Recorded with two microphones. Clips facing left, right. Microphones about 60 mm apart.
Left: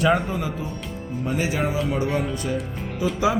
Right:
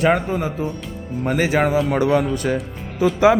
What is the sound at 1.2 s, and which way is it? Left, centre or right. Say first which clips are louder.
Speech: right 6 dB; right.